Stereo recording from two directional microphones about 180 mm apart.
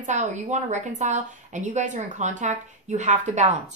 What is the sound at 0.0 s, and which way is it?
A woman's voice, 40° right (ahead or behind).